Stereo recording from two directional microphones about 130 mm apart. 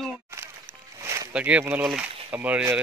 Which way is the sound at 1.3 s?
10° right (ahead or behind).